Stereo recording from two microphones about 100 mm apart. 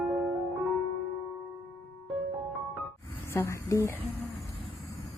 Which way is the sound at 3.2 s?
25° left (ahead or behind).